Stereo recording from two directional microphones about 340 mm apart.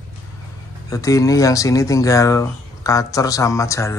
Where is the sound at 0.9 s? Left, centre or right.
Centre.